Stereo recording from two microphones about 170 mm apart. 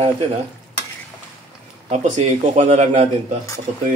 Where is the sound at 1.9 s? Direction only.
40° right (ahead or behind).